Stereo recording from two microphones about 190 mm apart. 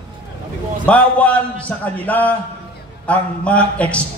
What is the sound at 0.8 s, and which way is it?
A man's voice, 5° left (ahead or behind).